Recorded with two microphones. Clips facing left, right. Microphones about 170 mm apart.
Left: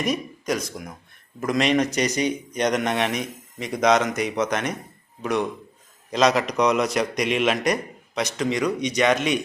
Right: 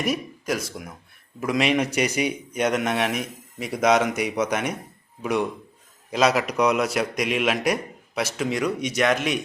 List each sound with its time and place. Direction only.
0.0 s a man's voice: 5° right (ahead or behind)